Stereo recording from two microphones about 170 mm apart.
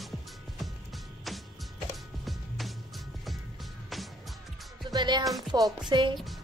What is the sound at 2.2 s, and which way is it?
Music, centre (ahead or behind).